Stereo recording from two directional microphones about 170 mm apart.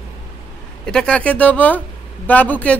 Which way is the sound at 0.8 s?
5° left (ahead or behind).